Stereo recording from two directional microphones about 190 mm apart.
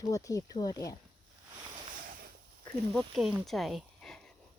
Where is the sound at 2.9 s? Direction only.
Centre (ahead or behind).